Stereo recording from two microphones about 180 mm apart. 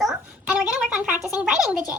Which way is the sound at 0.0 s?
5° right (ahead or behind).